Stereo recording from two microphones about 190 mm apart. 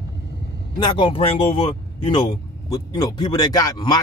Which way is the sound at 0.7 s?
25° left (ahead or behind).